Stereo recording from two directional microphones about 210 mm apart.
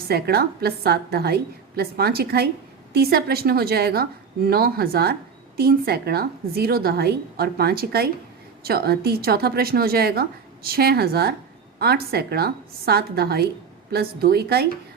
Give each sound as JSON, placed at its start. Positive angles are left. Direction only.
{"t": 0.1, "sound": "a woman's voice", "side_deg": -45}